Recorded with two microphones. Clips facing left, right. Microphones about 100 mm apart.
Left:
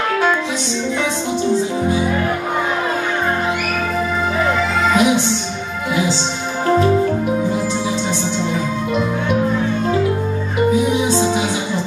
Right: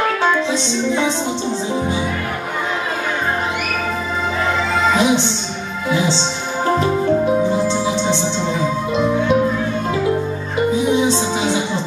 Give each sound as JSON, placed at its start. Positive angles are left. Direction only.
{"t": 4.9, "sound": "music", "side_deg": -25}
{"t": 7.5, "sound": "music", "side_deg": -25}